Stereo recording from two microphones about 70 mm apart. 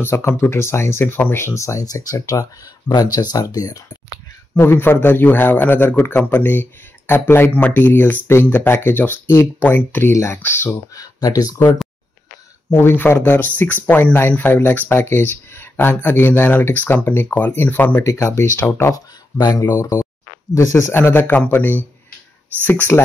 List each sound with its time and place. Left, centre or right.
0.0 s speech: left
3.4 s speech: left
4.6 s speech: left
11.0 s speech: left
12.6 s speech: left
18.0 s speech: left
19.3 s speech: left
19.8 s speech: left